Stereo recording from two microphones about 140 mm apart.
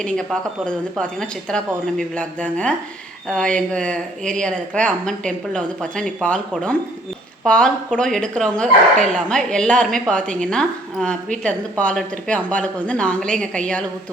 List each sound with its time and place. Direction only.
0.0 s a woman's voice: 5° left (ahead or behind)